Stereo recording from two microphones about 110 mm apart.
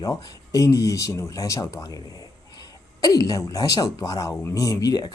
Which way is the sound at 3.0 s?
35° left (ahead or behind).